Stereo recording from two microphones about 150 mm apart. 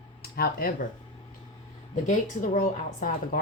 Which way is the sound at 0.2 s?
90° left.